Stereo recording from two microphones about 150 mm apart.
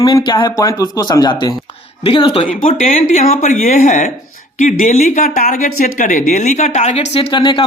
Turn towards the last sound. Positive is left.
turn(degrees=35)  # may be behind; listen again after turning